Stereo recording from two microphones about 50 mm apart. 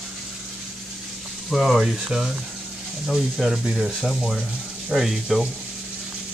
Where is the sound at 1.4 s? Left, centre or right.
Centre.